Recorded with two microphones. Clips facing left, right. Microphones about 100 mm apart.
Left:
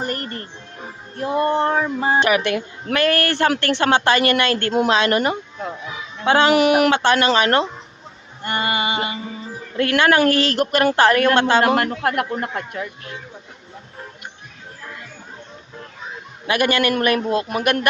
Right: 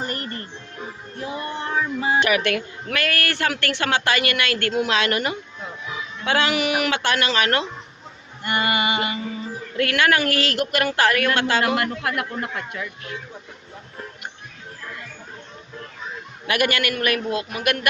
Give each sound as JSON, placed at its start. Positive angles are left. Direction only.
{"t": 0.0, "sound": "music", "side_deg": 45}
{"t": 1.2, "sound": "female singing", "side_deg": 50}
{"t": 2.1, "sound": "a woman's voice", "side_deg": 20}
{"t": 6.5, "sound": "female singing", "side_deg": 50}
{"t": 6.9, "sound": "a woman's voice", "side_deg": 25}
{"t": 11.6, "sound": "female singing", "side_deg": 40}
{"t": 12.4, "sound": "speech", "side_deg": 40}
{"t": 16.5, "sound": "a woman's voice", "side_deg": 25}